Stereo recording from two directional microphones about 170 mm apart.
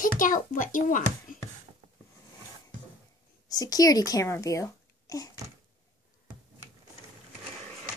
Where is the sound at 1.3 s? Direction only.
55° left (ahead or behind).